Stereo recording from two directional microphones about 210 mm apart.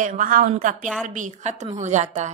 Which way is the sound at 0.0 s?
40° right (ahead or behind).